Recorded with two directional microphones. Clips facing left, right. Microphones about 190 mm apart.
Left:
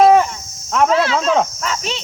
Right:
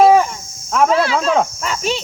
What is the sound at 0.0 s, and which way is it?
Cricket, centre (ahead or behind).